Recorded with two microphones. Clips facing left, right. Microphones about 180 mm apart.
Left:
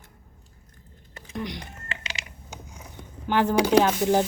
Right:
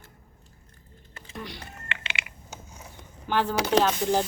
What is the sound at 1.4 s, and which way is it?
Speech, 15° left (ahead or behind).